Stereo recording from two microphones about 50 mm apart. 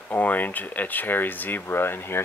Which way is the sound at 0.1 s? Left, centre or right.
Left.